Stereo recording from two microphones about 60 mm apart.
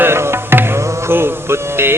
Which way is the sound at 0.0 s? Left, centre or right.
Right.